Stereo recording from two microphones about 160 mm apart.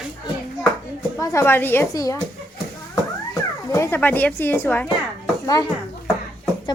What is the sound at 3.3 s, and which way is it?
A child's voice, 20° left (ahead or behind).